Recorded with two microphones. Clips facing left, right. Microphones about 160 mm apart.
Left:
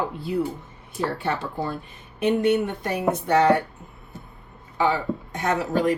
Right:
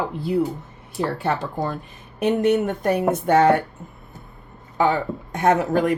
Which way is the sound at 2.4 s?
45° right (ahead or behind).